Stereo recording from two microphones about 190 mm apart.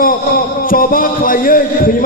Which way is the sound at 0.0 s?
50° left (ahead or behind).